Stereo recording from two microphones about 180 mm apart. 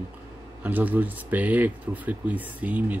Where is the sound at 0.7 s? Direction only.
10° right (ahead or behind).